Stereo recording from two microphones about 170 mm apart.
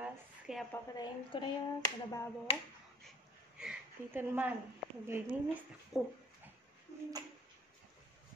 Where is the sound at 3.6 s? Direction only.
5° right (ahead or behind).